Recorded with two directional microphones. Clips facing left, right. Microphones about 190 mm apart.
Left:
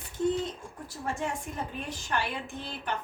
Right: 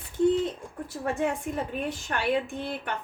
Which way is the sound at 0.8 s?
60° right (ahead or behind).